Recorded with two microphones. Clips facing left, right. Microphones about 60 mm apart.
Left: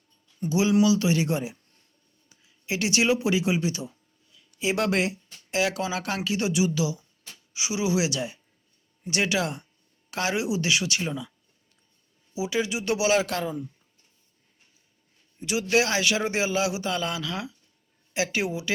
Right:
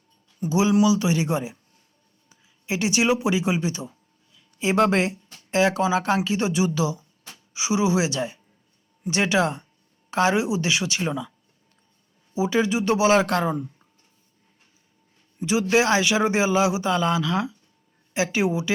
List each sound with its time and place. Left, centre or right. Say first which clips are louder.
0.4 s speech: right 2 dB; centre
0.9 s speech: right 1 dB; right
12.3 s speech: right 5 dB; right
15.4 s speech: right 4 dB; right